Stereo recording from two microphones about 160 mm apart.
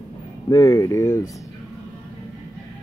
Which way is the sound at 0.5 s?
20° left (ahead or behind).